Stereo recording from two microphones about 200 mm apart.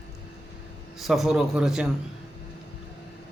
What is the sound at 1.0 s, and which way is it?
Speech, centre (ahead or behind).